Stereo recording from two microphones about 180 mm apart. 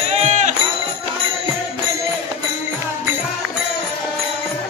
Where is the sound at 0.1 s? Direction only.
40° right (ahead or behind).